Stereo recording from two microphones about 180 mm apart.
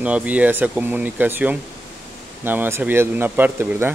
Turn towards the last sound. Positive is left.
turn(degrees=-10)  # may be behind; listen again after turning